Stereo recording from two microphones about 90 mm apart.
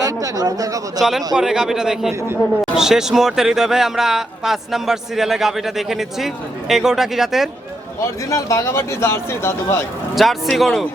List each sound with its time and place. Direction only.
0.0 s speech: 45° right (ahead or behind)
0.9 s a man's voice: 5° right (ahead or behind)
8.3 s speech: 35° left (ahead or behind)
10.2 s speech: centre (ahead or behind)